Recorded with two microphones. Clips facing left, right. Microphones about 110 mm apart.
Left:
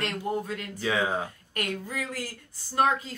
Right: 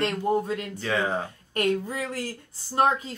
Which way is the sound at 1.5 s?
25° right (ahead or behind).